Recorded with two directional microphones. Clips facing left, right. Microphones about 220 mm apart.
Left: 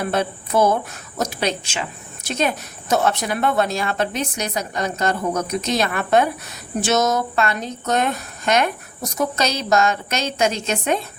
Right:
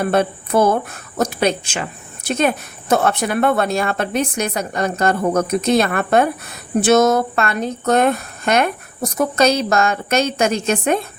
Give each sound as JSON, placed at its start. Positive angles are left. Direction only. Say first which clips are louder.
{"t": 0.0, "sound": "a woman's voice", "louder": "right 5 dB", "side_deg": -55}